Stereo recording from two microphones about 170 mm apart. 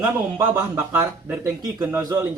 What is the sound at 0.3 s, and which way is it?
Speech, 15° right (ahead or behind).